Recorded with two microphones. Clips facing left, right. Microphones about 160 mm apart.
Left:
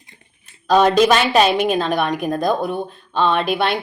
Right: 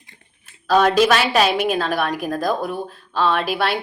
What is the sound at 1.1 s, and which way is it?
Speech, 5° right (ahead or behind).